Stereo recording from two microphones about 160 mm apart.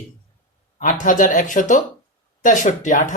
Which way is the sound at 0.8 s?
55° left (ahead or behind).